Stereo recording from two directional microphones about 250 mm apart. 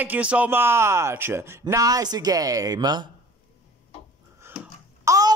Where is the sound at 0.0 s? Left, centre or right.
Centre.